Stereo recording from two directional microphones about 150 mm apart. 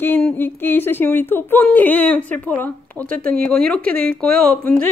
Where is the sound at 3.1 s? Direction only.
75° right (ahead or behind).